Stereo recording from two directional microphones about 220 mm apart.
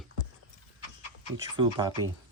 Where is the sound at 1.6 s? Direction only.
20° right (ahead or behind).